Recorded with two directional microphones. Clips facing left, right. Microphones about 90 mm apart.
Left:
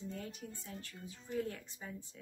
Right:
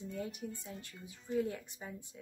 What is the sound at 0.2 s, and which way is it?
Speech, 15° right (ahead or behind).